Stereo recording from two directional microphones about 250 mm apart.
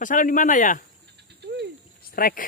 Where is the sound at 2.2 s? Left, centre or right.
Left.